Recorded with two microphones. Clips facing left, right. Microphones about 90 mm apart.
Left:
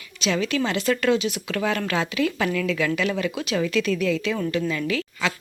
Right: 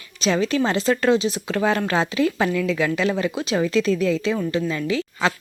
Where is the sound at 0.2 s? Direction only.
35° right (ahead or behind).